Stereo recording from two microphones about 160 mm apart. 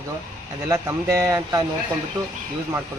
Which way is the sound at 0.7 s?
20° right (ahead or behind).